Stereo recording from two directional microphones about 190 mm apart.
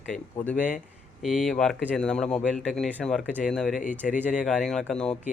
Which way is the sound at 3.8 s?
40° left (ahead or behind).